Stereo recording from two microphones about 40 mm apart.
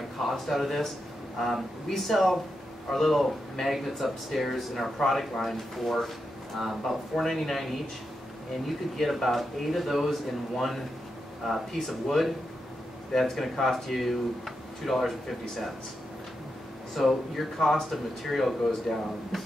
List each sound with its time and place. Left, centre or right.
0.2 s speech: centre
16.9 s speech: centre